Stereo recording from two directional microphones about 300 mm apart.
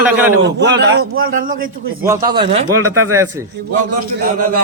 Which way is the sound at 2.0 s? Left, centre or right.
Centre.